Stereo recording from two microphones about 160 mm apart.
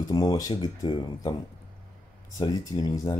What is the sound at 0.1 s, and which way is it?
Speech, 25° left (ahead or behind).